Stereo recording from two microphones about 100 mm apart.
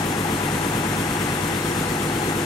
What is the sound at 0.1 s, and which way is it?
Vehicle, 45° left (ahead or behind).